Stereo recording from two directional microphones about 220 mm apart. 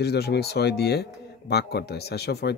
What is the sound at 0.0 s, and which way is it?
Speech, 50° left (ahead or behind).